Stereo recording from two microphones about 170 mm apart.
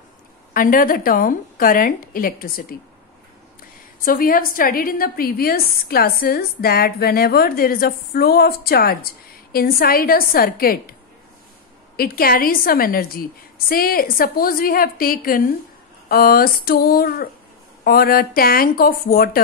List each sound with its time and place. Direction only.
0.5 s a woman's voice: 55° left (ahead or behind)
4.0 s a woman's voice: 55° left (ahead or behind)
12.0 s a woman's voice: 60° left (ahead or behind)